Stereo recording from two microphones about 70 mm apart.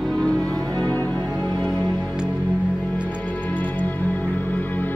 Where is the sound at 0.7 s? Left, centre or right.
Left.